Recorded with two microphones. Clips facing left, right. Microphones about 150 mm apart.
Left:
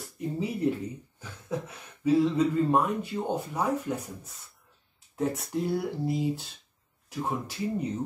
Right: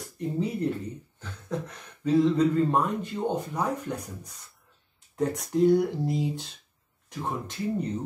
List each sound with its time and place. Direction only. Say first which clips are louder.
0.0 s speech: right 2 dB; 5° left (ahead or behind)